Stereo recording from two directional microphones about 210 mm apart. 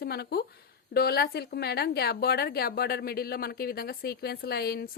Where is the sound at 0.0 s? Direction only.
50° left (ahead or behind).